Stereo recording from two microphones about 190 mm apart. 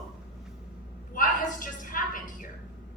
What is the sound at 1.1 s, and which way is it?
A woman's voice, 45° left (ahead or behind).